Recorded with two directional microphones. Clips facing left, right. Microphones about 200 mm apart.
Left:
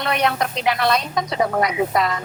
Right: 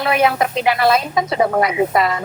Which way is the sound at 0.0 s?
5° right (ahead or behind).